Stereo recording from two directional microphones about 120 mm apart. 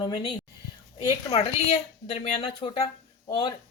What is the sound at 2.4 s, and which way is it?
Speech, 35° left (ahead or behind).